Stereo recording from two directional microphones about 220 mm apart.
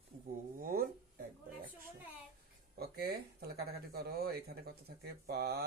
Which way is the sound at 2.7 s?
45° right (ahead or behind).